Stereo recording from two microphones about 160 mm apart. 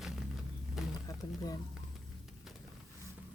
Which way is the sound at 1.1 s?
25° left (ahead or behind).